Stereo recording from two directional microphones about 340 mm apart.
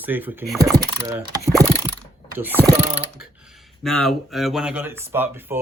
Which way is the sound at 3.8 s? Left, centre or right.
Centre.